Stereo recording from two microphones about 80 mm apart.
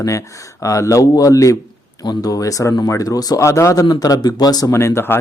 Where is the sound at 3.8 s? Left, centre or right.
Left.